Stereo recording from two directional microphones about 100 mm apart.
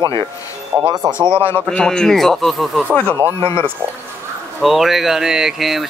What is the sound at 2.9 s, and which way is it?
Speech, 15° left (ahead or behind).